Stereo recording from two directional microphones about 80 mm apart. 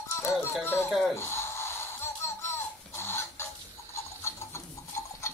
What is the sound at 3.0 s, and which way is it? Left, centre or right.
Chicken, left.